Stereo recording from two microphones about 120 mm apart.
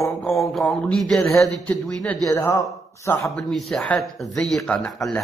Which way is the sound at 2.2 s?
30° left (ahead or behind).